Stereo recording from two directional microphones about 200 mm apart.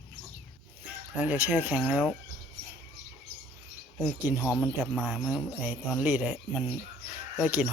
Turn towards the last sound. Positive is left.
turn(degrees=-10)  # may be behind; listen again after turning